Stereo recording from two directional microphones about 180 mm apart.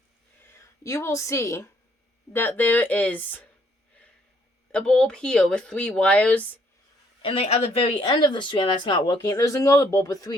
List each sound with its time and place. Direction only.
0.9 s speech: 15° left (ahead or behind)
4.7 s speech: 5° left (ahead or behind)
7.2 s speech: 35° left (ahead or behind)